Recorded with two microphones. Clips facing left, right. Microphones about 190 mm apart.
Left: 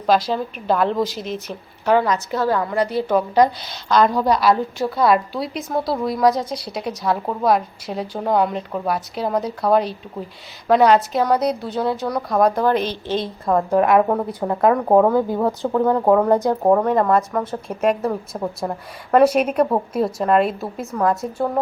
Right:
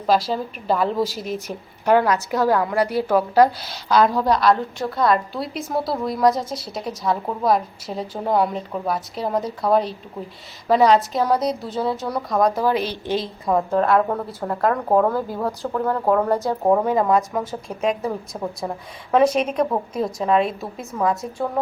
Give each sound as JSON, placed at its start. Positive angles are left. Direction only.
{"t": 0.0, "sound": "a woman's voice", "side_deg": 0}
{"t": 13.7, "sound": "speech", "side_deg": 15}
{"t": 16.7, "sound": "a woman's voice", "side_deg": -5}